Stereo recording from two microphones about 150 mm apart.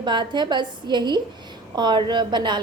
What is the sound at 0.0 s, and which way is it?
A woman's voice, 30° right (ahead or behind).